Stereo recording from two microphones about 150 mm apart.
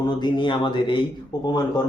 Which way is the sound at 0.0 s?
30° left (ahead or behind).